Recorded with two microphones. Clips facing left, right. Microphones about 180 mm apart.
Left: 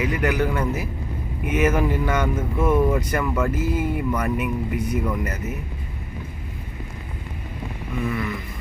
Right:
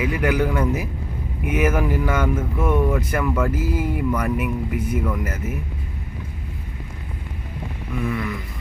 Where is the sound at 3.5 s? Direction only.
10° right (ahead or behind).